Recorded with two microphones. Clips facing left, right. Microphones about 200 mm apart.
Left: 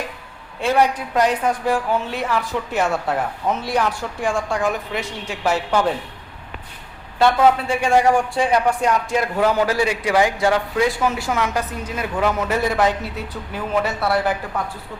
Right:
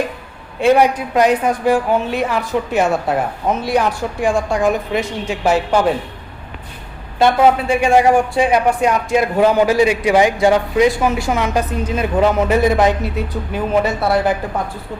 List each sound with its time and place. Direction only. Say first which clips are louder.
0.6 s a woman's voice: right 6 dB; 20° right (ahead or behind)
7.2 s a woman's voice: right 3 dB; 15° right (ahead or behind)